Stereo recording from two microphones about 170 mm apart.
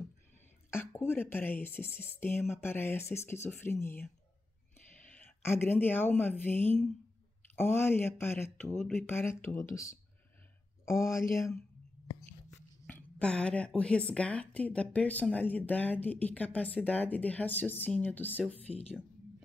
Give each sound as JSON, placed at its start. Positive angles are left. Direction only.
{"t": 0.7, "sound": "a woman's voice", "side_deg": 15}
{"t": 12.8, "sound": "a woman's voice", "side_deg": 10}